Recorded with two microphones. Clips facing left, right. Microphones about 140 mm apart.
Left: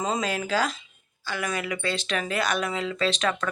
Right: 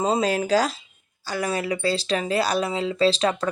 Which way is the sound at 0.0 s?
35° right (ahead or behind).